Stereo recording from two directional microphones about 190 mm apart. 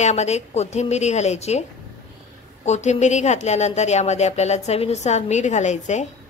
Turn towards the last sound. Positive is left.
turn(degrees=40)  # may be behind; listen again after turning